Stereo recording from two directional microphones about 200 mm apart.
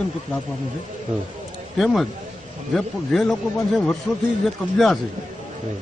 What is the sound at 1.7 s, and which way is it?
Speech, centre (ahead or behind).